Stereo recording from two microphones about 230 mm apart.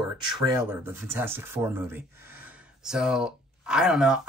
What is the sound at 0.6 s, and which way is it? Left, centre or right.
Speech, centre.